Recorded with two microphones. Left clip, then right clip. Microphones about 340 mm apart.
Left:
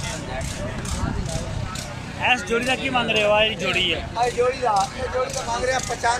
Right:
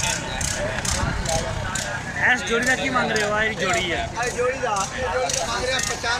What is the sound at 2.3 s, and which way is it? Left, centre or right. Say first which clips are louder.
Speech: right 1 dB; centre.